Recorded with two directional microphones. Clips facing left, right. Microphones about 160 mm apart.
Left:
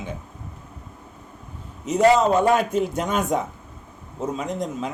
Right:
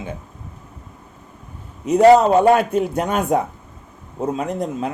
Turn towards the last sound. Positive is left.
turn(degrees=-60)  # may be behind; listen again after turning